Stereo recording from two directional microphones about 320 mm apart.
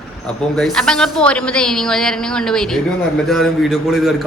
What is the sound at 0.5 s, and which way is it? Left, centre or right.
A man's voice, centre.